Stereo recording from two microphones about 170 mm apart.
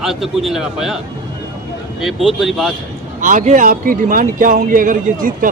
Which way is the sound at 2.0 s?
Centre (ahead or behind).